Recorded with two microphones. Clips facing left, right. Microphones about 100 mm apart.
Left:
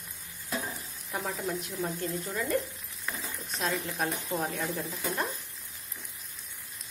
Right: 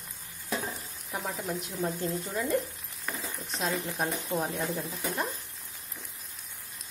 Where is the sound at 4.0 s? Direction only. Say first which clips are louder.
Right 1 dB; 20° right (ahead or behind).